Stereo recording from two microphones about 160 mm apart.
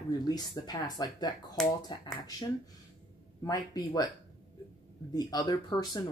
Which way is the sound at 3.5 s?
25° left (ahead or behind).